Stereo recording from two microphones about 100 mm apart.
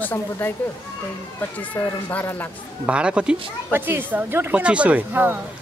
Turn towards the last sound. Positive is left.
turn(degrees=-20)  # may be behind; listen again after turning